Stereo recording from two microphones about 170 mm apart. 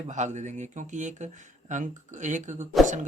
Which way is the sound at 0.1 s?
45° right (ahead or behind).